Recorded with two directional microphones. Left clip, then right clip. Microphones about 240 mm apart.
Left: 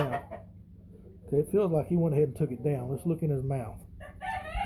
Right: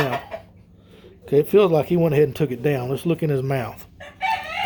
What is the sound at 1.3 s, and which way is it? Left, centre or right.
Speech, right.